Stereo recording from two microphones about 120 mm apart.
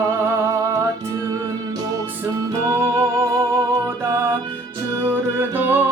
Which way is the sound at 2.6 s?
25° right (ahead or behind).